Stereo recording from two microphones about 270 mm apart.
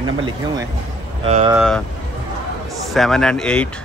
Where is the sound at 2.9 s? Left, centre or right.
Centre.